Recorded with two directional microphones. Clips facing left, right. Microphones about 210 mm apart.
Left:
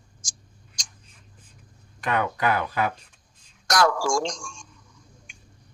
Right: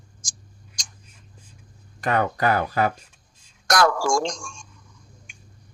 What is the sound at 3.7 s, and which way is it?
Speech, 55° right (ahead or behind).